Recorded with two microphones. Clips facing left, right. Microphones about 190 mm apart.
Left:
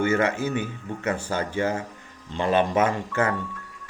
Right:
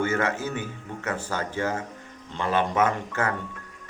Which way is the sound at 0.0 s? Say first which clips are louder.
Left 3 dB; 15° left (ahead or behind).